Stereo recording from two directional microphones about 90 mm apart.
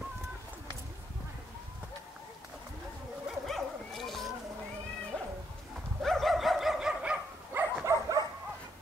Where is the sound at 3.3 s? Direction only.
Centre (ahead or behind).